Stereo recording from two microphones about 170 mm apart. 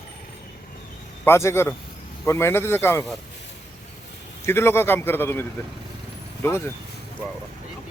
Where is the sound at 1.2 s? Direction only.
15° left (ahead or behind).